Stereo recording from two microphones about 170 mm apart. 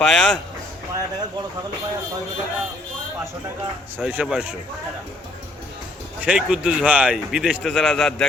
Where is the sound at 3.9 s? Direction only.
5° right (ahead or behind).